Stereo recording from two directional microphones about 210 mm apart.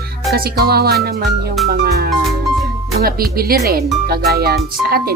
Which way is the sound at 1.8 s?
50° right (ahead or behind).